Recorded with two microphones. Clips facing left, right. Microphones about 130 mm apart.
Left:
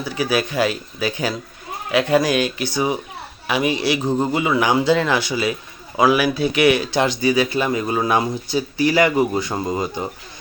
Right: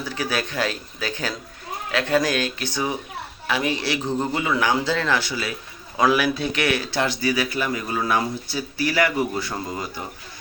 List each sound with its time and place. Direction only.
0.0 s speech: 10° left (ahead or behind)
6.0 s speech: 5° left (ahead or behind); by 10.0 s 20° left (ahead or behind)